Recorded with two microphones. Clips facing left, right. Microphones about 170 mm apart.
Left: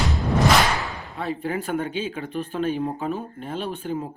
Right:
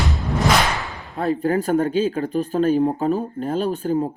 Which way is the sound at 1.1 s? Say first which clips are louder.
Right 8 dB; 40° right (ahead or behind).